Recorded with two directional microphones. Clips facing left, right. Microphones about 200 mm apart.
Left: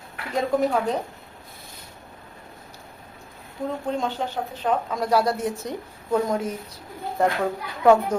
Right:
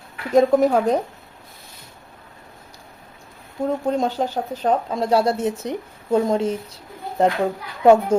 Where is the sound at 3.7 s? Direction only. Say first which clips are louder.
Right 5 dB; 40° right (ahead or behind).